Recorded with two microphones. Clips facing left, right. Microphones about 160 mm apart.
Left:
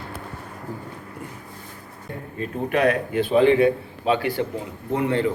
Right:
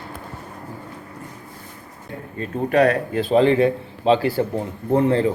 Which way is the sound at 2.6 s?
35° right (ahead or behind).